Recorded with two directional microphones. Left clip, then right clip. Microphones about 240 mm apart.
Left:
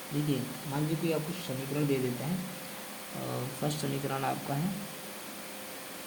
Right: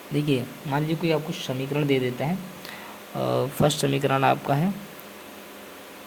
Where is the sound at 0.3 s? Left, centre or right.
Right.